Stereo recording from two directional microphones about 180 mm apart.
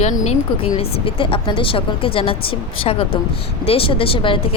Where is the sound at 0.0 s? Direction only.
35° left (ahead or behind).